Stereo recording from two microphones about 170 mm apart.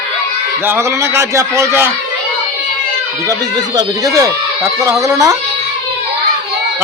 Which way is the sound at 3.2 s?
20° right (ahead or behind).